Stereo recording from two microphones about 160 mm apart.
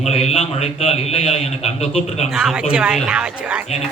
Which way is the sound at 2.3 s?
5° right (ahead or behind).